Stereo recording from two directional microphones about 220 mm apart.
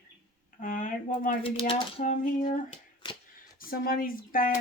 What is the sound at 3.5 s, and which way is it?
Speech, 40° left (ahead or behind).